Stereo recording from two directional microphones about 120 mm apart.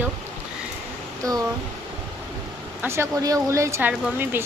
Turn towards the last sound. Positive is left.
turn(degrees=-15)  # may be behind; listen again after turning